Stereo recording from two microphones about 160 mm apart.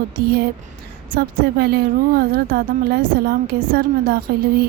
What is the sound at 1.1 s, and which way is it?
A woman's voice, 70° right (ahead or behind).